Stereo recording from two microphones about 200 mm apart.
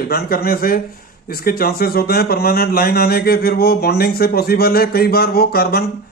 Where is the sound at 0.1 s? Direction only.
50° left (ahead or behind).